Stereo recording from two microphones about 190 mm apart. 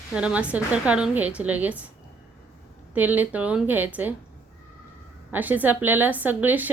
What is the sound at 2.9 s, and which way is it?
Speech, 10° right (ahead or behind).